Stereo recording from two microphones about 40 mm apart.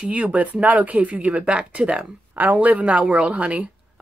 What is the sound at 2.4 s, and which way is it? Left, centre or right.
Speech, right.